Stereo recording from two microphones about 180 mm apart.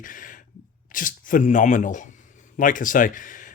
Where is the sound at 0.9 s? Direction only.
50° left (ahead or behind).